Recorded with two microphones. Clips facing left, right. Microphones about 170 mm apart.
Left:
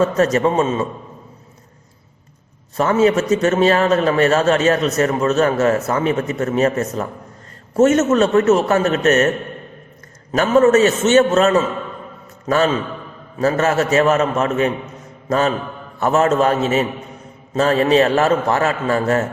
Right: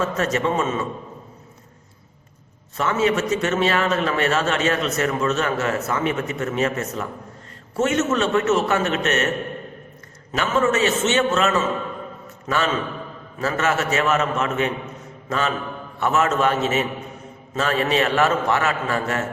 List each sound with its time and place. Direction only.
0.0 s a man's voice: 40° left (ahead or behind)
2.7 s a man's voice: 40° left (ahead or behind)
10.3 s a man's voice: 40° left (ahead or behind)